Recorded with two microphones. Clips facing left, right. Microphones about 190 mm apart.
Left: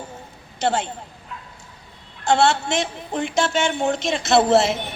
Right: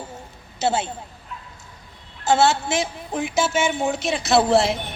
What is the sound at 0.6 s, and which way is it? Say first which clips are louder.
Speech: even; 5° right (ahead or behind).